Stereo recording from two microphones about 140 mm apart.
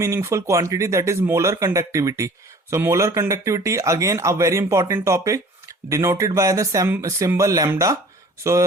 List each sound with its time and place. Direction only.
0.0 s speech: 20° right (ahead or behind)